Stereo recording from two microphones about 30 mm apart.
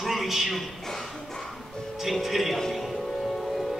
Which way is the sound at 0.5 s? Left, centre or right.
Centre.